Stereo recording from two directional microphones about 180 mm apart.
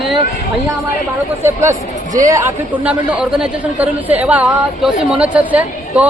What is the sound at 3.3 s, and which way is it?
A woman's voice, 10° right (ahead or behind).